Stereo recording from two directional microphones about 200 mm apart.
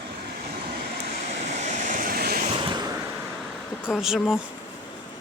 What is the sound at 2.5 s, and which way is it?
Vehicle, 20° right (ahead or behind).